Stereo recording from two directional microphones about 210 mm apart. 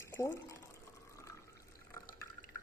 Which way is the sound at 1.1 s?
15° left (ahead or behind).